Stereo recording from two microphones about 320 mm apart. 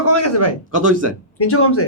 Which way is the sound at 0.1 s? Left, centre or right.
Left.